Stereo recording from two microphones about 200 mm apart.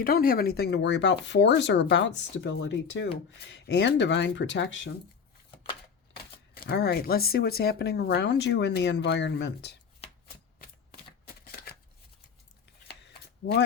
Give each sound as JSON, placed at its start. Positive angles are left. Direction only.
{"t": 0.0, "sound": "speech", "side_deg": 45}
{"t": 6.5, "sound": "speech", "side_deg": 55}